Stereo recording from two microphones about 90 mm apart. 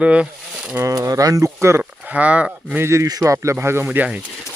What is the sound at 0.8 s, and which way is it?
Speech, 35° right (ahead or behind).